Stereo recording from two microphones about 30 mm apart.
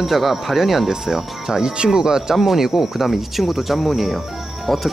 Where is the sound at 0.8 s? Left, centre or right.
Centre.